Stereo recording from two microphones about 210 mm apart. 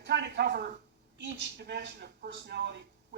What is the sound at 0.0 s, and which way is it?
A man's voice, 55° right (ahead or behind).